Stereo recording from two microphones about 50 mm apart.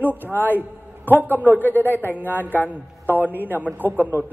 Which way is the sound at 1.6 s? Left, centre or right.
Left.